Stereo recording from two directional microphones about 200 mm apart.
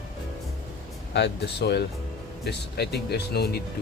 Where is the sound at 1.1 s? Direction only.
60° left (ahead or behind).